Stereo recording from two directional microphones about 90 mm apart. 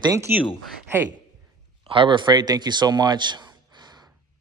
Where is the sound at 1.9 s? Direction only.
65° right (ahead or behind).